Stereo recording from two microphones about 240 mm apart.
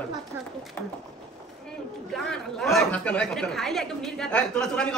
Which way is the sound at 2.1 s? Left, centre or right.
Centre.